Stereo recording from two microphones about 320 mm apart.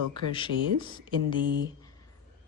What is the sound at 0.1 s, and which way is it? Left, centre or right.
Speech, centre.